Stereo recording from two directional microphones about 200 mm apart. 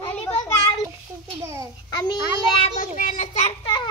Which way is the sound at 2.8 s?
40° left (ahead or behind).